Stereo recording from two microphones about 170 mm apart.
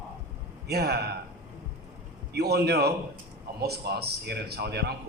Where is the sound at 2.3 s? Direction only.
70° right (ahead or behind).